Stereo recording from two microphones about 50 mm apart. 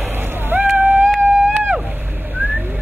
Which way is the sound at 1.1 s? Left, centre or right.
Centre.